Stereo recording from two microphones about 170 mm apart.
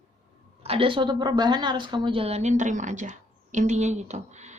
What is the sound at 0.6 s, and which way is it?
A woman's voice, 35° right (ahead or behind).